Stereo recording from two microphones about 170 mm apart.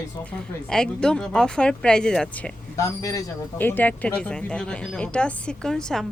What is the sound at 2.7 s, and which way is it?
A woman's voice, 20° left (ahead or behind).